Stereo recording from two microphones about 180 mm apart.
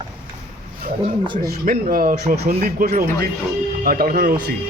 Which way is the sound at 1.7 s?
55° right (ahead or behind).